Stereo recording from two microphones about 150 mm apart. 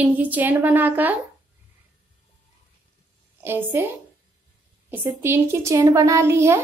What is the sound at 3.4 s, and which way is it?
Speech, 15° right (ahead or behind).